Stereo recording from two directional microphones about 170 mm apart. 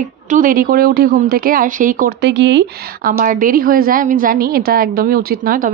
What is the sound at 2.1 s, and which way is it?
A woman's voice, 90° right.